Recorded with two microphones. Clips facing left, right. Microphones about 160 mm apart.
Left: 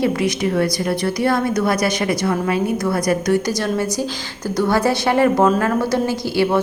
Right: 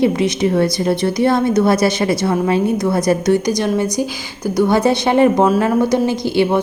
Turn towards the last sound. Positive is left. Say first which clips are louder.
# right 3 dB
turn(degrees=-20)  # may be behind; listen again after turning